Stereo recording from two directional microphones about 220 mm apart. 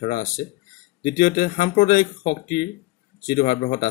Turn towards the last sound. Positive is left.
turn(degrees=35)  # may be behind; listen again after turning